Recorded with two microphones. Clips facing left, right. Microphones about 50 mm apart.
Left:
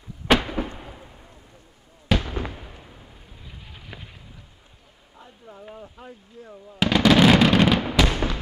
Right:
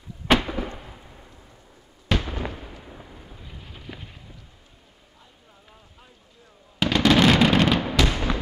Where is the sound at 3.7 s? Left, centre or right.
Centre.